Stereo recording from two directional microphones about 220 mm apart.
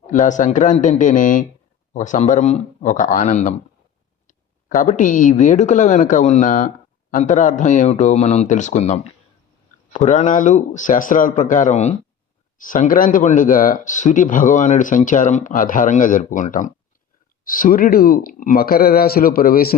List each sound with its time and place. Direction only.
0.1 s speech: 35° left (ahead or behind)
4.3 s a sound: 35° left (ahead or behind)
5.3 s speech: 30° left (ahead or behind)